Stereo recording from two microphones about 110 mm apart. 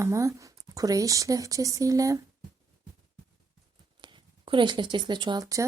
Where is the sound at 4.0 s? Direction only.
50° right (ahead or behind).